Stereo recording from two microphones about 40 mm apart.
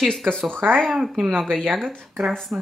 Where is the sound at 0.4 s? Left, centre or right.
Right.